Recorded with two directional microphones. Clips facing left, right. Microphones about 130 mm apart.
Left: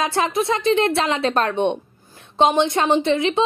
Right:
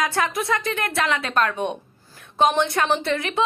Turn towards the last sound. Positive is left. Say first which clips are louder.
# left 5 dB
turn(degrees=20)  # may be behind; listen again after turning